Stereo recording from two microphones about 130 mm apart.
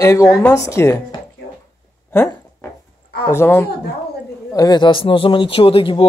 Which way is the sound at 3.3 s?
20° left (ahead or behind).